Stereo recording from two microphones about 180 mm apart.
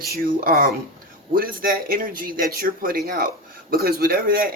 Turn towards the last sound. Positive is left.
turn(degrees=-55)  # may be behind; listen again after turning